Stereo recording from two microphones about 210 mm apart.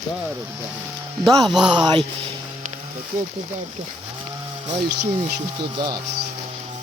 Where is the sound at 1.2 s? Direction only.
Centre (ahead or behind).